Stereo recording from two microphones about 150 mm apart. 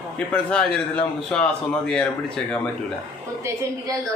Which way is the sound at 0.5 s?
5° left (ahead or behind).